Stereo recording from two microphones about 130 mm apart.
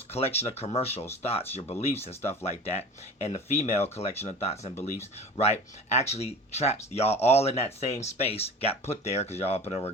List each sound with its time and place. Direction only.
0.1 s speech: 50° left (ahead or behind)